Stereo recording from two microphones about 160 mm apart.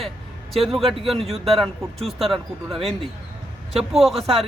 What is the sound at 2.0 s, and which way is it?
Speech, centre (ahead or behind).